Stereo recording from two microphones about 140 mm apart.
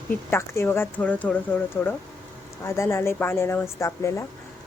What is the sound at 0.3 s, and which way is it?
A woman's voice, 15° left (ahead or behind).